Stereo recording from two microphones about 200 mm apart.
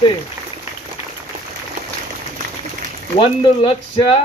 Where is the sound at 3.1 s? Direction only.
25° left (ahead or behind).